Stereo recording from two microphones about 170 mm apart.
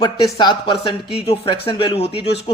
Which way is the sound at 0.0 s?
30° left (ahead or behind).